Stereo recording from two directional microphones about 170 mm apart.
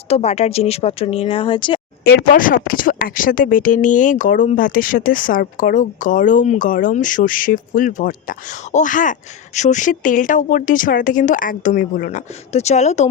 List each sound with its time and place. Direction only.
0.1 s speech: 40° left (ahead or behind)
2.0 s speech: 55° left (ahead or behind)